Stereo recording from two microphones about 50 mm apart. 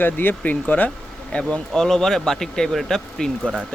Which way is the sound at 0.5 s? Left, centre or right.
Left.